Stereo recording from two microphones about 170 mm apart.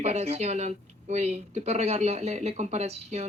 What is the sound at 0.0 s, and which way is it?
Speech, 40° right (ahead or behind).